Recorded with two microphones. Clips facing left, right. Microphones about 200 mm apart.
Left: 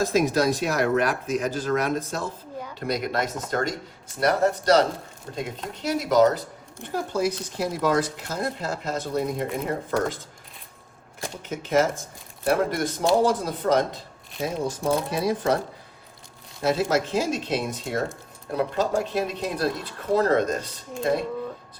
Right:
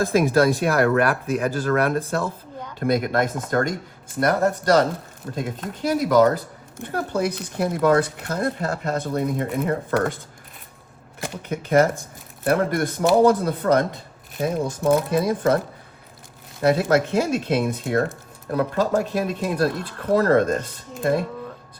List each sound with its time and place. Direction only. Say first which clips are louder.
0.0 s speech: right 3 dB; 55° right (ahead or behind)
11.4 s speech: right 4 dB; 60° right (ahead or behind)